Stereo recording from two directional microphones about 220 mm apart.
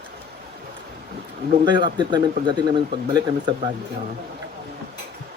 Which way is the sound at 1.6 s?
20° right (ahead or behind).